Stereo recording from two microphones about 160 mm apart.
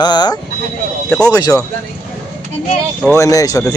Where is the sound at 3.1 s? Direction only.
20° left (ahead or behind).